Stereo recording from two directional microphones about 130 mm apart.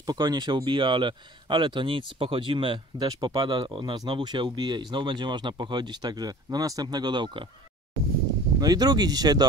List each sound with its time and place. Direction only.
0.0 s speech: 30° right (ahead or behind)
8.5 s speech: 30° right (ahead or behind)